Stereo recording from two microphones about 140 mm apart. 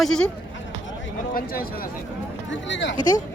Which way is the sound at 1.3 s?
90° left.